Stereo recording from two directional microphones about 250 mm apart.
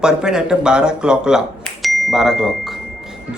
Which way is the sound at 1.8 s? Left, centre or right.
Centre.